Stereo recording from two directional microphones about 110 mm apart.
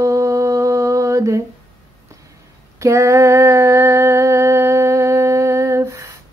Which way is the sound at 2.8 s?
25° right (ahead or behind).